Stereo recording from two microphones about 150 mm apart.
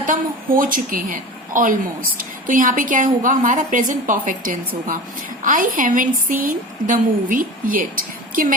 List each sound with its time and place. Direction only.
0.0 s a woman's voice: 65° right (ahead or behind)